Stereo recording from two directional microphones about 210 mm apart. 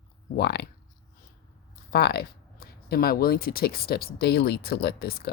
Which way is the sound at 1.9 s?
50° left (ahead or behind).